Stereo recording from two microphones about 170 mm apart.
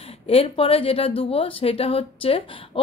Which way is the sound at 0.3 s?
35° left (ahead or behind).